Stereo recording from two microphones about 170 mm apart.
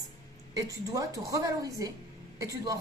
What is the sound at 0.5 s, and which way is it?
A woman's voice, 20° right (ahead or behind).